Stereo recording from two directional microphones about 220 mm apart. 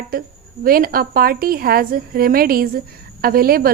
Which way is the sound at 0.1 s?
40° right (ahead or behind).